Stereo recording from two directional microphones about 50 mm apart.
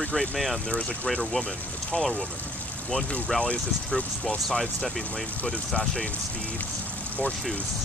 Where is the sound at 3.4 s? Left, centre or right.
Centre.